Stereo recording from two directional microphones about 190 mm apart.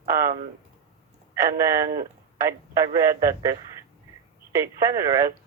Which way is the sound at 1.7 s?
15° right (ahead or behind).